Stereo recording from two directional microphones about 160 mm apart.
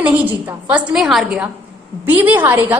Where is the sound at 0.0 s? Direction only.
10° right (ahead or behind).